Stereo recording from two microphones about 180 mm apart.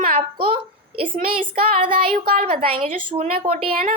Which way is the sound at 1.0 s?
55° right (ahead or behind).